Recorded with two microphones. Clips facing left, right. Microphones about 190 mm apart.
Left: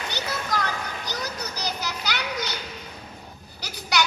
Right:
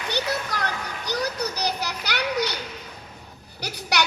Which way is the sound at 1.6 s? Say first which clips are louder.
Right 3 dB; 65° right (ahead or behind).